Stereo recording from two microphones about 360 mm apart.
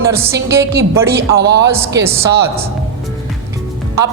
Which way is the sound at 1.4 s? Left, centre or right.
Right.